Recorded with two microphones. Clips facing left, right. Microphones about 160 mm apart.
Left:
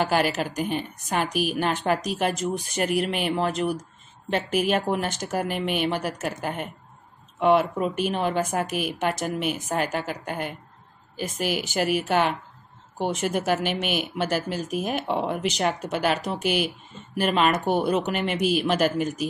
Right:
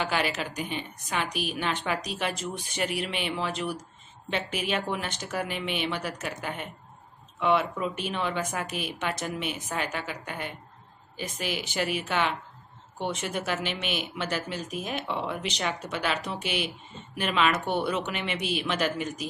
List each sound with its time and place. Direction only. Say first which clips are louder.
0.0 s speech: left 6 dB; 45° left (ahead or behind)